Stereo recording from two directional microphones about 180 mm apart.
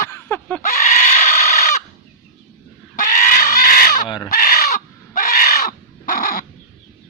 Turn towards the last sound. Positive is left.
turn(degrees=55)  # may be behind; listen again after turning